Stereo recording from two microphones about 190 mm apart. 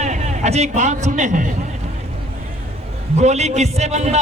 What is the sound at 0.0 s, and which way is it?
A man's voice, 35° right (ahead or behind).